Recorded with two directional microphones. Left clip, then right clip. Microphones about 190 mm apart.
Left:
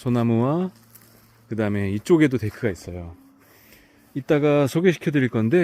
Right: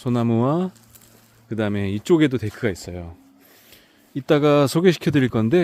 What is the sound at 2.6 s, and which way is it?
Speech, 15° right (ahead or behind).